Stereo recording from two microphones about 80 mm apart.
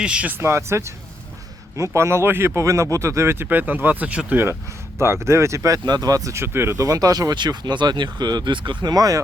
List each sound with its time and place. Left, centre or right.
0.0 s speech: centre
0.3 s speech: right; by 4.4 s centre
4.9 s speech: right
6.4 s speech: right
6.7 s speech: right